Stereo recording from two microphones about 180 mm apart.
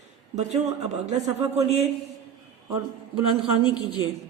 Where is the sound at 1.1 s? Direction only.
20° right (ahead or behind).